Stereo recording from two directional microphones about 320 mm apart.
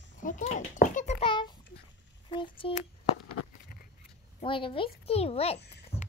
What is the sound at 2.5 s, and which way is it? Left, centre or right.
Speech, centre.